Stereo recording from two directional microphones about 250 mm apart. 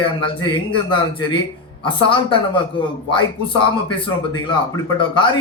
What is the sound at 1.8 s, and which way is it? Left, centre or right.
Speech, centre.